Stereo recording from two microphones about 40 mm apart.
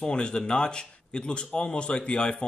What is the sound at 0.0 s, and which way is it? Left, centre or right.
Speech, left.